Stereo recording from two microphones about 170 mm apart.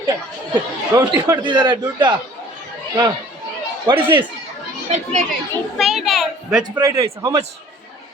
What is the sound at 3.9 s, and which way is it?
Speech, 30° right (ahead or behind).